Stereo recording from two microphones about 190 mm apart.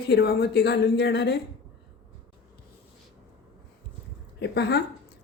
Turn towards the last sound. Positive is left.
turn(degrees=60)  # may be behind; listen again after turning